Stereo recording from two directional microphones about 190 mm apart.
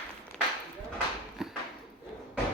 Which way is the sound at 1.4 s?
Centre (ahead or behind).